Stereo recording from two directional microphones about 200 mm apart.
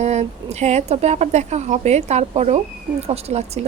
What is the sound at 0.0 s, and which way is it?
Speech, 35° right (ahead or behind).